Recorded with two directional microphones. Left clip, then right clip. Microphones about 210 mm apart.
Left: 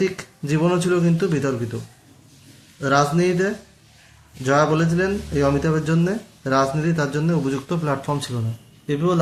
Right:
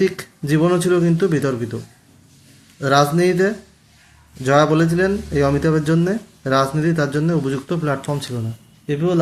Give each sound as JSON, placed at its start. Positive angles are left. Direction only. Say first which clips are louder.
{"t": 0.0, "sound": "speech", "louder": "right 4 dB", "side_deg": -15}
{"t": 2.8, "sound": "speech", "louder": "right 3 dB", "side_deg": -15}